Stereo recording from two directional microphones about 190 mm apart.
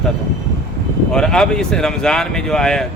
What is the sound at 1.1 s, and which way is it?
Speech, 5° left (ahead or behind).